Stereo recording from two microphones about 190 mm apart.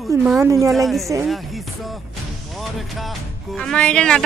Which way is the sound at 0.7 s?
Centre (ahead or behind).